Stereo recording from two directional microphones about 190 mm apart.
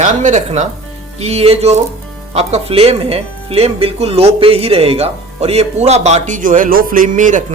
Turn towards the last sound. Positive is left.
turn(degrees=-40)  # may be behind; listen again after turning